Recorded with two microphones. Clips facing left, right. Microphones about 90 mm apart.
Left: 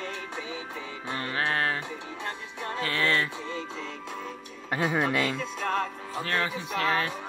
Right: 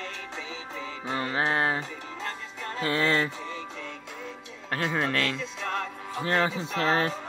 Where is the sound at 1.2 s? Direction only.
20° right (ahead or behind).